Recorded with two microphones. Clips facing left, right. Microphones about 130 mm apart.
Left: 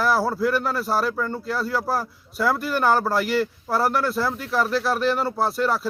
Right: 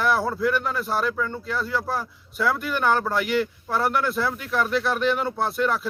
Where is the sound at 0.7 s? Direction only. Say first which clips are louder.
Left 2 dB; 40° left (ahead or behind).